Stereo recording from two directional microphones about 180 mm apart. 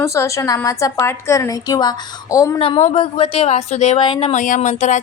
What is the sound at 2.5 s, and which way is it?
A woman's voice, 30° left (ahead or behind).